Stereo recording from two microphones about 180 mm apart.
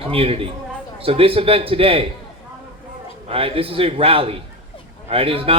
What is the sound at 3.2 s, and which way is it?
A man's voice, 30° right (ahead or behind).